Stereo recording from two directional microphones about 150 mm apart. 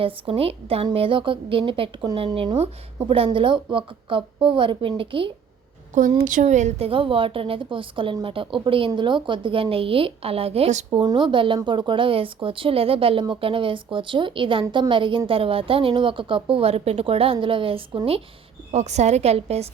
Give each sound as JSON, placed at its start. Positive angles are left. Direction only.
{"t": 0.0, "sound": "a woman's voice", "side_deg": -40}
{"t": 5.9, "sound": "a woman's voice", "side_deg": -60}
{"t": 11.0, "sound": "a woman's voice", "side_deg": -30}
{"t": 18.7, "sound": "a woman's voice", "side_deg": -50}